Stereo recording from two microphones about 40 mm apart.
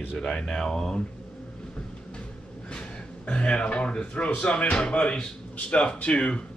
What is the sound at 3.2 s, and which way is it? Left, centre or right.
Speech, left.